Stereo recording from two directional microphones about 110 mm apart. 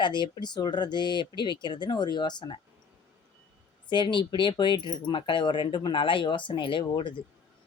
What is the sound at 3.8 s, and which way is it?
A man's voice, 45° left (ahead or behind).